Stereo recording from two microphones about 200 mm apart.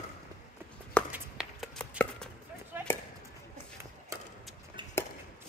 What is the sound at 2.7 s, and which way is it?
Chop, 10° right (ahead or behind).